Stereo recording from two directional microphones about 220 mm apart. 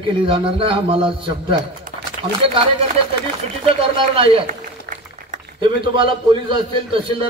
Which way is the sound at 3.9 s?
25° right (ahead or behind).